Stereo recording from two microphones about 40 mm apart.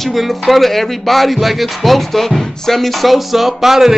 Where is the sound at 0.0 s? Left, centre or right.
Centre.